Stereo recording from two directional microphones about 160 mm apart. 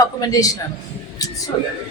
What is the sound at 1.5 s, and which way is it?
Speech, 35° left (ahead or behind).